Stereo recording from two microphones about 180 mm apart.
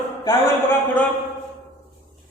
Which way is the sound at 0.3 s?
15° left (ahead or behind).